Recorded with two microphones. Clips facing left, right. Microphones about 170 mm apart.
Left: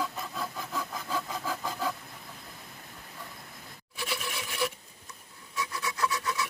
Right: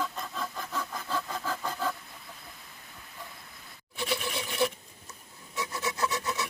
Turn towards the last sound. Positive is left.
turn(degrees=-25)  # may be behind; listen again after turning